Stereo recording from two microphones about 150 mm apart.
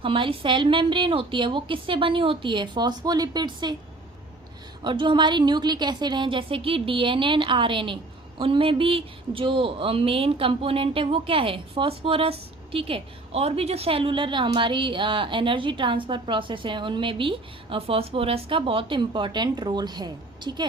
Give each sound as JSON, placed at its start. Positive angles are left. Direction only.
{"t": 0.0, "sound": "speech", "side_deg": -35}
{"t": 4.8, "sound": "speech", "side_deg": -30}